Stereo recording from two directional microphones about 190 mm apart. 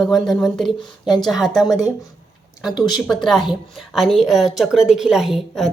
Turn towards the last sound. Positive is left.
turn(degrees=0)  # may be behind; listen again after turning